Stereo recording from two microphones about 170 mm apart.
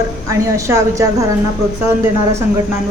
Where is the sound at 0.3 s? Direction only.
20° right (ahead or behind).